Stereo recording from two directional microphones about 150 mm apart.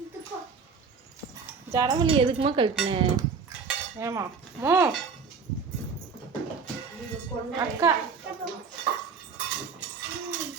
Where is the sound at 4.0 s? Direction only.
20° right (ahead or behind).